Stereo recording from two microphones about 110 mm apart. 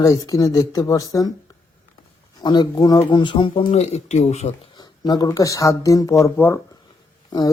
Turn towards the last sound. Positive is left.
turn(degrees=35)  # may be behind; listen again after turning